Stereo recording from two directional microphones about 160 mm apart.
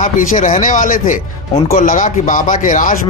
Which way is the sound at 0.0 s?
50° left (ahead or behind).